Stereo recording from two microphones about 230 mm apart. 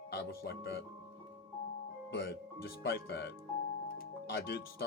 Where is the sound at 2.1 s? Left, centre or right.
Left.